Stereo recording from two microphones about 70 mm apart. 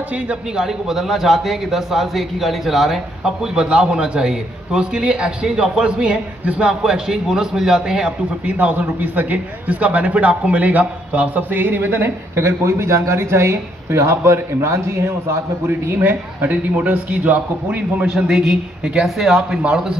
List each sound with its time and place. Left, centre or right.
0.3 s a man's voice: centre
8.5 s a man's voice: right
16.0 s a man's voice: right
18.0 s a man's voice: centre